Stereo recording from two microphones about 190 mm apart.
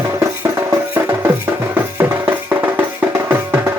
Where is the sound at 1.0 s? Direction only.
15° right (ahead or behind).